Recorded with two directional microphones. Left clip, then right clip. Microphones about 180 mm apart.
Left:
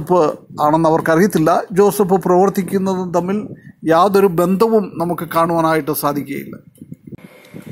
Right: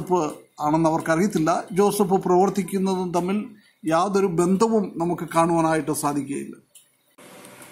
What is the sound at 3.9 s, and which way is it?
Speech, 40° left (ahead or behind).